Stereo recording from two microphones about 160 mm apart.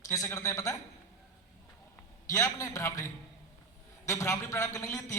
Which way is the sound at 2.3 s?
20° left (ahead or behind).